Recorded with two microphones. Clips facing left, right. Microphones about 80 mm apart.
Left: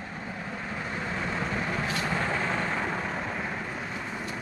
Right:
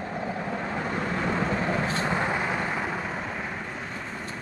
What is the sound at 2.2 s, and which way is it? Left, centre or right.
Vehicle, centre.